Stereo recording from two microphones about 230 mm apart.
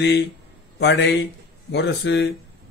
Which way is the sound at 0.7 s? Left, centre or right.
Left.